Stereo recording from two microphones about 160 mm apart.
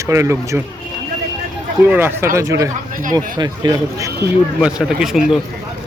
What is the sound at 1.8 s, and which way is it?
Speech, 10° right (ahead or behind).